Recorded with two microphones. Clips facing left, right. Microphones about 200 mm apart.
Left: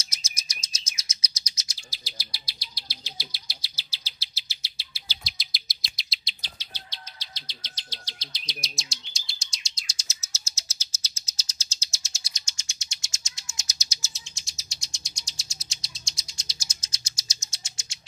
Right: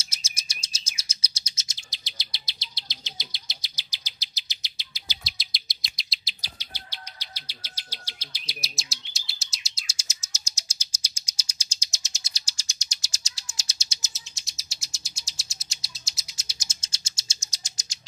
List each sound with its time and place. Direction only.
0.1 s bird: 30° right (ahead or behind)
5.2 s chirp: centre (ahead or behind)
6.4 s bird vocalization: 10° right (ahead or behind)
12.4 s bird: 35° right (ahead or behind)
14.1 s bird: centre (ahead or behind)
16.5 s bird: 25° right (ahead or behind)